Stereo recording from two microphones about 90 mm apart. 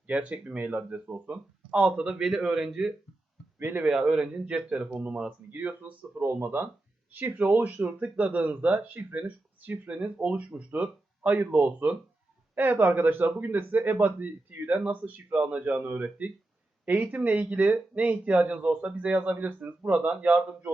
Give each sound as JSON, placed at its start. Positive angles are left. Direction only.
{"t": 0.1, "sound": "speech", "side_deg": -15}
{"t": 3.6, "sound": "speech", "side_deg": -25}
{"t": 3.8, "sound": "speech", "side_deg": -5}